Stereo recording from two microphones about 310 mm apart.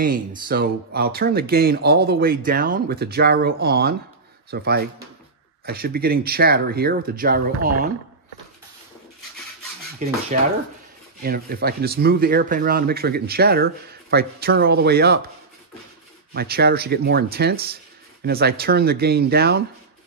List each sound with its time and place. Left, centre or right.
0.5 s speech: right
10.0 s speech: right
11.2 s speech: right
16.3 s speech: right